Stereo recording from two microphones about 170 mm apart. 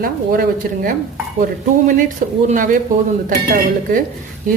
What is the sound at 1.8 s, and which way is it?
Speech, 50° right (ahead or behind).